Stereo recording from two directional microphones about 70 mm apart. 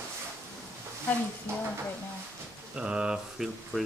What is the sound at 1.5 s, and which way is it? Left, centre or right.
Speech, right.